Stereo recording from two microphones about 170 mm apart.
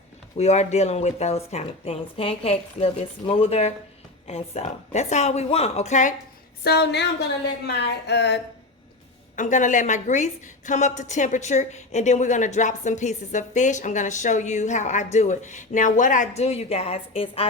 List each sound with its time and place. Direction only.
0.3 s speech: 40° left (ahead or behind)
6.7 s speech: 80° left
9.3 s a woman's voice: 50° left (ahead or behind)